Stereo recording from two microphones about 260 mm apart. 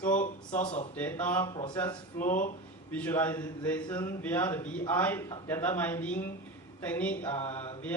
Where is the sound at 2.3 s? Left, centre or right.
Left.